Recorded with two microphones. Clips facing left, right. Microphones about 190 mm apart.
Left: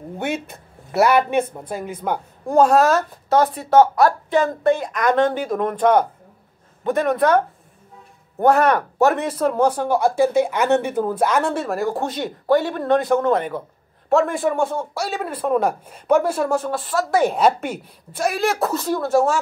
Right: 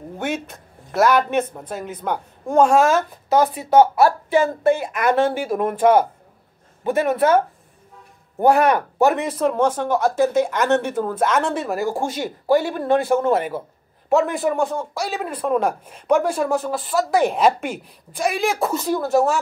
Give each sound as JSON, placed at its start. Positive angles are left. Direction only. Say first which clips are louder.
{"t": 1.5, "sound": "speech", "louder": "left 1 dB", "side_deg": 10}